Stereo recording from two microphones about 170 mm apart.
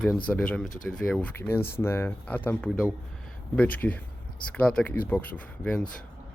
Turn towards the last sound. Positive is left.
turn(degrees=5)  # may be behind; listen again after turning